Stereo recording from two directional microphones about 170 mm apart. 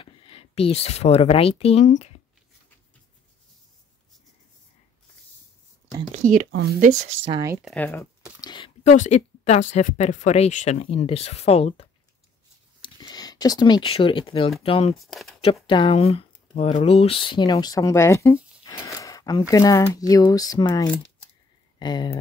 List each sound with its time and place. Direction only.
0.0 s speech: 30° left (ahead or behind)
6.1 s a sound: 45° right (ahead or behind)
7.0 s speech: 40° right (ahead or behind)
7.3 s speech: 15° right (ahead or behind)
7.6 s speech: 10° left (ahead or behind)
8.4 s speech: 25° left (ahead or behind)
8.8 s speech: 45° left (ahead or behind)
12.8 s speech: 25° left (ahead or behind)
15.0 s speech: centre (ahead or behind)
15.4 s speech: 30° left (ahead or behind)